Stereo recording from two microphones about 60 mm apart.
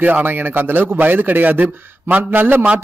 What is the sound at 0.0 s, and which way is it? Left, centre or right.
A man's voice, right.